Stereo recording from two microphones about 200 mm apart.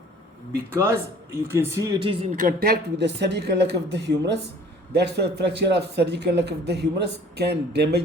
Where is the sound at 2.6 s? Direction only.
55° right (ahead or behind).